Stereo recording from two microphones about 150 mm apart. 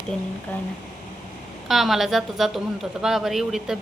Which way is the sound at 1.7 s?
Centre (ahead or behind).